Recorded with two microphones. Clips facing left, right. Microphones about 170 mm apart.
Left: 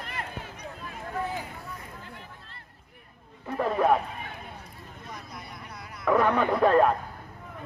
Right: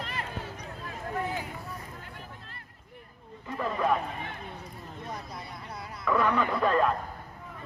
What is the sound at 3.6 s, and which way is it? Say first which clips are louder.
Speech: left 5 dB; 60° left (ahead or behind).